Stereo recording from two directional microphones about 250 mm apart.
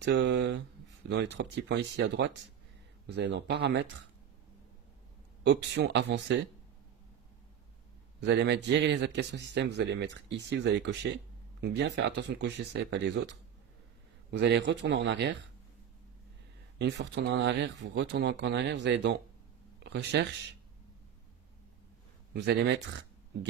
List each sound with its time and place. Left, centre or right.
0.0 s speech: right
5.4 s speech: right
8.2 s speech: right
16.7 s speech: right
22.3 s speech: right